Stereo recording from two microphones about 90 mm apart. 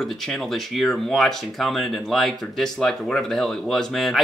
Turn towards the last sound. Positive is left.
turn(degrees=0)  # may be behind; listen again after turning